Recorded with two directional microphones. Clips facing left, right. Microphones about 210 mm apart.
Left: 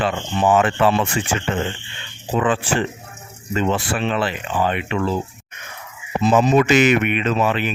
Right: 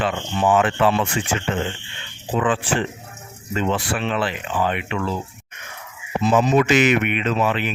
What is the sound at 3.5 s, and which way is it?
Speech, 35° left (ahead or behind).